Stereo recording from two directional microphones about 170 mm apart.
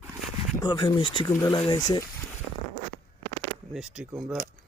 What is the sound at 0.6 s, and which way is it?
Speech, 25° left (ahead or behind).